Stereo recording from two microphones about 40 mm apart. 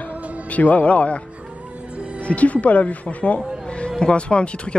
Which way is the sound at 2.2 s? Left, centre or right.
Left.